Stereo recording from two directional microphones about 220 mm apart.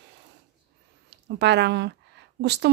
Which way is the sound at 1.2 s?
50° right (ahead or behind).